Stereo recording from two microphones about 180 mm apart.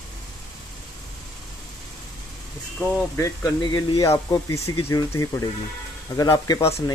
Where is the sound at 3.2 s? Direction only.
20° left (ahead or behind).